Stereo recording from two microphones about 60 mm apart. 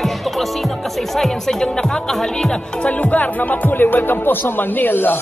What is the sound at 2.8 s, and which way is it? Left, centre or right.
Music, left.